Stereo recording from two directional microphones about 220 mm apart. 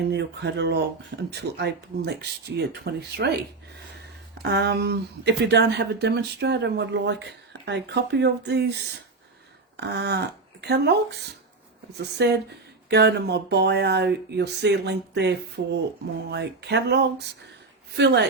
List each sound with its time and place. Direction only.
0.1 s speech: 50° right (ahead or behind)
4.4 s speech: 50° right (ahead or behind)